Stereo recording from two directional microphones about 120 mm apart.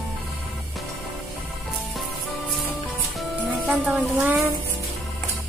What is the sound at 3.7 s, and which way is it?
Music, centre (ahead or behind).